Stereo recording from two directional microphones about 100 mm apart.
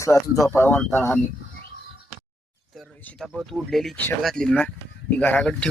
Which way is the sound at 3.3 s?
5° left (ahead or behind).